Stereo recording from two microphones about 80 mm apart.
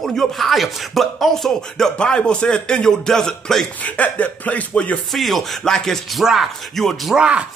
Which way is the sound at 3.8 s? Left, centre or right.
Centre.